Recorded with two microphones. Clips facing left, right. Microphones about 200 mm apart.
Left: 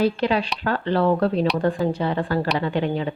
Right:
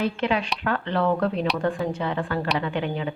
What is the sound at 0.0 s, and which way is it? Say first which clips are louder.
A woman's voice: left 4 dB; 35° left (ahead or behind).